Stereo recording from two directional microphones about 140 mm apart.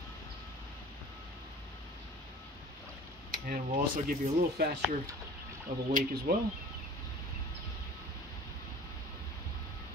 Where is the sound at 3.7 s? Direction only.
90° right.